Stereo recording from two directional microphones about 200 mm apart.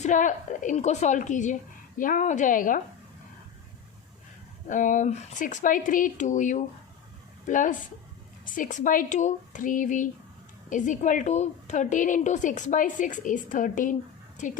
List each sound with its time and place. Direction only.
0.0 s a woman's voice: 40° left (ahead or behind)
4.7 s a woman's voice: 40° left (ahead or behind)